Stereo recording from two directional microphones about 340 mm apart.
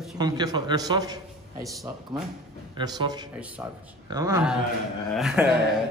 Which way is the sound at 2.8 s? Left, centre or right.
Centre.